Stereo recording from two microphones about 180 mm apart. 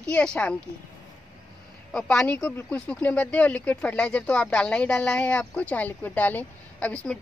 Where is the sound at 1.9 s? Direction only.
5° left (ahead or behind).